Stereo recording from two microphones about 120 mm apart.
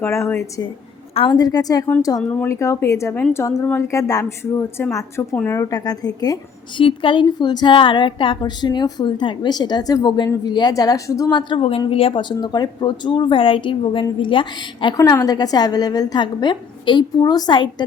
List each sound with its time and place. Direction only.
0.0 s a woman's voice: 20° left (ahead or behind)
1.3 s a woman's voice: 35° left (ahead or behind)
2.3 s a woman's voice: 20° left (ahead or behind)
6.7 s a woman's voice: 45° left (ahead or behind)
11.9 s a woman's voice: 50° left (ahead or behind)
12.4 s a woman's voice: 35° left (ahead or behind)
14.9 s a woman's voice: 30° left (ahead or behind)